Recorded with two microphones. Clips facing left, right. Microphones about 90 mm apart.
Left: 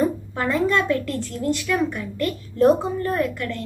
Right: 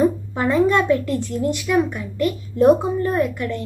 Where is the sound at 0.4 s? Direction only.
15° right (ahead or behind).